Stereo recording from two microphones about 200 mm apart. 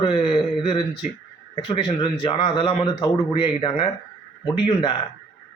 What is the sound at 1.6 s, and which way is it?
A man's voice, 25° left (ahead or behind).